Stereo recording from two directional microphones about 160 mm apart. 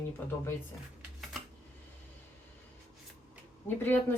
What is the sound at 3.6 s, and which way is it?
Speech, 15° left (ahead or behind).